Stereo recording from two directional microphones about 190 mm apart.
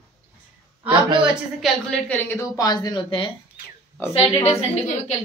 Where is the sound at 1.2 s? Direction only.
Centre (ahead or behind).